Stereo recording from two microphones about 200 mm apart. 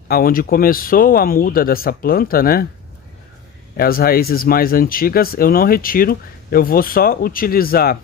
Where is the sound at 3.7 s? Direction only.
50° left (ahead or behind).